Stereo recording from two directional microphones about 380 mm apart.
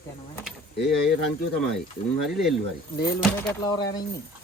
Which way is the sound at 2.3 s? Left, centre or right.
Centre.